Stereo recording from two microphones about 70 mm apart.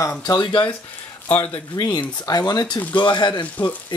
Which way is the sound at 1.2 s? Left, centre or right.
Left.